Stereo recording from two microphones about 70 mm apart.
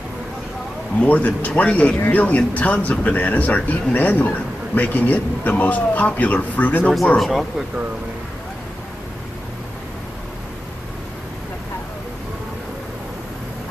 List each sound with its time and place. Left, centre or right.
1.0 s speech: left
7.2 s speech: centre